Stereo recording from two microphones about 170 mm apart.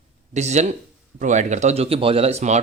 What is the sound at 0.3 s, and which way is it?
Speech, 40° right (ahead or behind).